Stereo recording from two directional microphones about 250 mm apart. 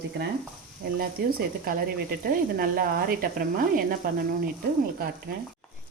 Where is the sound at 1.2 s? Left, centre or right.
Right.